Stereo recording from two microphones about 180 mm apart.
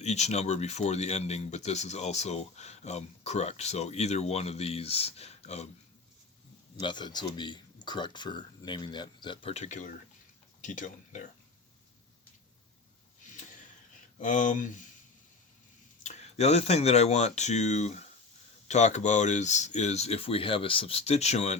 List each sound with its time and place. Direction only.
0.0 s speech: 40° left (ahead or behind)
6.7 s speech: 25° left (ahead or behind); by 11.2 s 45° left (ahead or behind)
14.2 s speech: 45° left (ahead or behind)
16.0 s speech: 40° left (ahead or behind)